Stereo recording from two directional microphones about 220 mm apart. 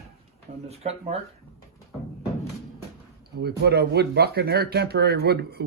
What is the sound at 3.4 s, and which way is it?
Speech, 45° right (ahead or behind).